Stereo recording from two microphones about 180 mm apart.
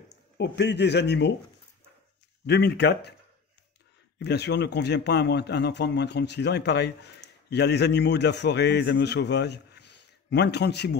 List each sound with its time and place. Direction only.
0.1 s speech: 75° left (ahead or behind)
2.4 s a man's voice: 65° left (ahead or behind)
4.2 s a man's voice: 65° left (ahead or behind)